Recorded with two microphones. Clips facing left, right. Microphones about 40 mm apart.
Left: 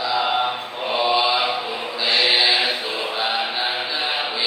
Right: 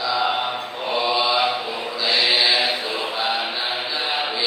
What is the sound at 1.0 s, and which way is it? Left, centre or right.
Mantra, left.